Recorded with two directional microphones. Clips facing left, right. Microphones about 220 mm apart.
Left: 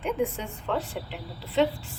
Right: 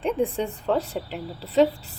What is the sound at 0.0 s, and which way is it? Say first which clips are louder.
A woman's voice: right 4 dB; 35° right (ahead or behind).